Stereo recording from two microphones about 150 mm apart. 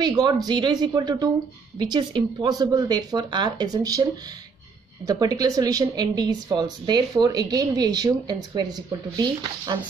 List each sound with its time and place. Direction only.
0.0 s a woman's voice: 25° right (ahead or behind)